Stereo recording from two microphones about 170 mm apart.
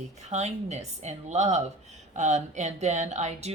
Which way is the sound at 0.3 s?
40° right (ahead or behind).